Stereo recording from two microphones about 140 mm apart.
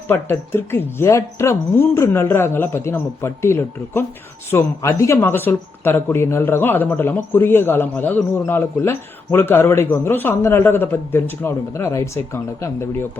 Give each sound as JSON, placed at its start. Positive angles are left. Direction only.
{"t": 0.1, "sound": "speech", "side_deg": 15}